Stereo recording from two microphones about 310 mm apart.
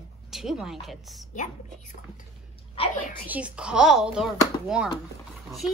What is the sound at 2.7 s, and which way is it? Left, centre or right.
Speech, left.